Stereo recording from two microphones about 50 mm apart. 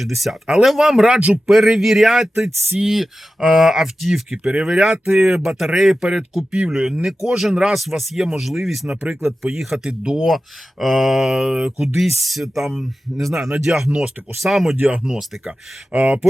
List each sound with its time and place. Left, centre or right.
0.0 s speech: centre
4.3 s speech: right
4.6 s speech: centre
10.2 s speech: centre
11.9 s speech: centre
14.8 s speech: right